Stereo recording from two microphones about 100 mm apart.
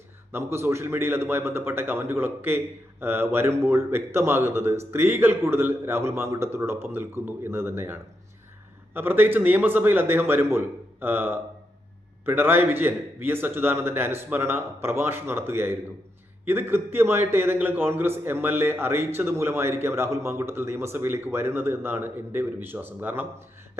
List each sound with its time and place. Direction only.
0.3 s a man's voice: 25° right (ahead or behind)